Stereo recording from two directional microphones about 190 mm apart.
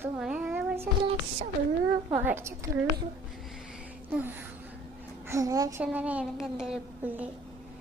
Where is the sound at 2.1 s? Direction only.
10° right (ahead or behind).